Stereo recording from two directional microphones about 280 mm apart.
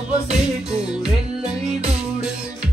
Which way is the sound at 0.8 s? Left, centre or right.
Centre.